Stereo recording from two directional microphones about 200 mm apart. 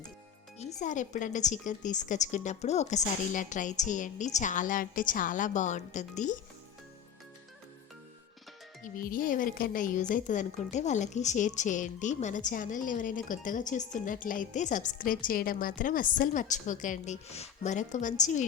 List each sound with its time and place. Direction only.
0.6 s speech: 35° left (ahead or behind)
8.8 s speech: 45° left (ahead or behind)